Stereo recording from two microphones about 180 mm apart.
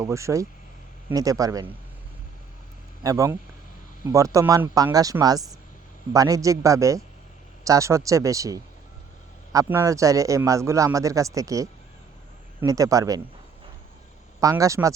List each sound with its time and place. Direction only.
0.0 s a man's voice: 15° right (ahead or behind)
3.0 s a man's voice: 20° right (ahead or behind)
14.4 s a man's voice: 15° right (ahead or behind)